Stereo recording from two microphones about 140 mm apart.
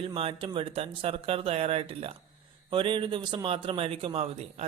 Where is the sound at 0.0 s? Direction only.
40° right (ahead or behind).